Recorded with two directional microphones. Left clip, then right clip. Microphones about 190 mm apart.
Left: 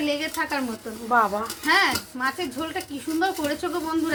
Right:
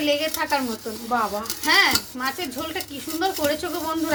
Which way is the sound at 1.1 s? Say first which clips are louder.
Left 4 dB; 40° left (ahead or behind).